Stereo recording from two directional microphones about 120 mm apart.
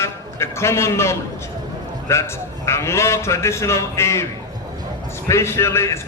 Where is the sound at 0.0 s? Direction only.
20° left (ahead or behind).